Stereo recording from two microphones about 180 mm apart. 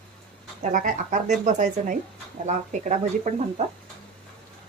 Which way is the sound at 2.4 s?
40° right (ahead or behind).